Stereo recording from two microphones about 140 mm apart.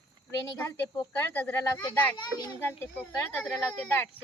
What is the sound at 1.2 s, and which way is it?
Speech, 15° left (ahead or behind).